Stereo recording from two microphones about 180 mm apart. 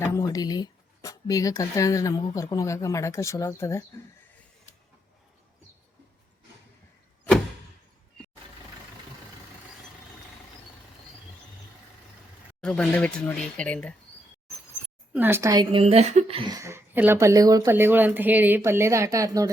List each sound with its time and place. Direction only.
0.0 s speech: 15° left (ahead or behind)
12.6 s speech: 5° left (ahead or behind)
15.1 s speech: 10° right (ahead or behind)
15.8 s a woman's voice: 35° right (ahead or behind)
16.5 s speech: 15° right (ahead or behind)